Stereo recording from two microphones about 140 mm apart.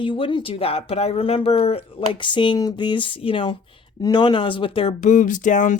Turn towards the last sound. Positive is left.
turn(degrees=65)  # may be behind; listen again after turning